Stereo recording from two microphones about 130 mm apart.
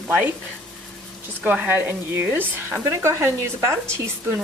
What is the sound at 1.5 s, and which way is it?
Speech, 15° right (ahead or behind).